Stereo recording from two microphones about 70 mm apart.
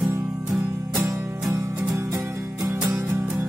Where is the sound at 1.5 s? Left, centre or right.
Right.